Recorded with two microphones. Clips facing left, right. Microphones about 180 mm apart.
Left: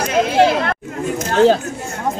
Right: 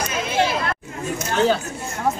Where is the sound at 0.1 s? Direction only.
65° left (ahead or behind).